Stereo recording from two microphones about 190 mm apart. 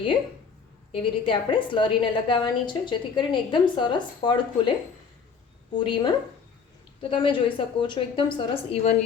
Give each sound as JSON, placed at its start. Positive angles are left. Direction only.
{"t": 1.2, "sound": "a woman's voice", "side_deg": 25}
{"t": 5.7, "sound": "a woman's voice", "side_deg": 25}